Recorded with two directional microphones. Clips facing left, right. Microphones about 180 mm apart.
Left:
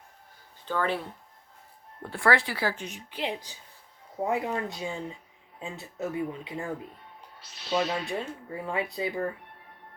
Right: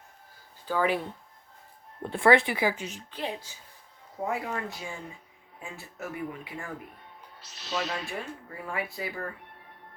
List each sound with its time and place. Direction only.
0.6 s speech: 10° right (ahead or behind)
2.0 s speech: 20° right (ahead or behind)
3.1 s speech: 15° left (ahead or behind)
7.7 s speech: 25° left (ahead or behind)